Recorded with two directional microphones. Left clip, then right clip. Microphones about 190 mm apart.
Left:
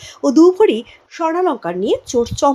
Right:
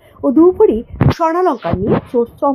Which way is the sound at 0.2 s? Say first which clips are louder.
Even; 20° left (ahead or behind).